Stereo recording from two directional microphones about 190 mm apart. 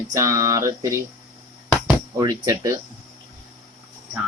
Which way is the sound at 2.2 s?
20° right (ahead or behind).